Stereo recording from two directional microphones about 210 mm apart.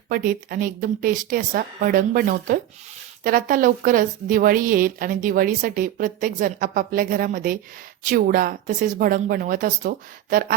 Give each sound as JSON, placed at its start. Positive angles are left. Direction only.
{"t": 0.1, "sound": "a woman's voice", "side_deg": -45}